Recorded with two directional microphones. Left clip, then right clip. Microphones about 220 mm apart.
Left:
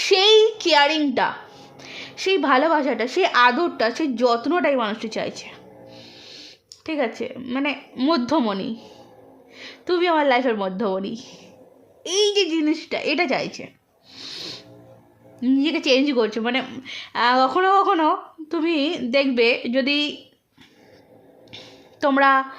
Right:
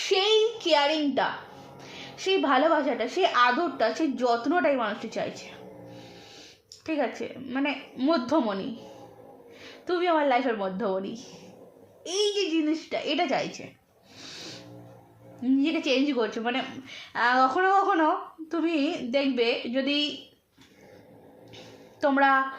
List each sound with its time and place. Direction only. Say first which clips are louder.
0.0 s a sound: left 8 dB; 45° left (ahead or behind)
2.1 s a woman's voice: left 5 dB; 45° left (ahead or behind)
6.8 s a woman's voice: left 4 dB; 40° left (ahead or behind)
14.2 s music: left 8 dB; 40° left (ahead or behind)
15.4 s a woman's voice: left 5 dB; 40° left (ahead or behind)
22.0 s a woman's voice: left 5 dB; 40° left (ahead or behind)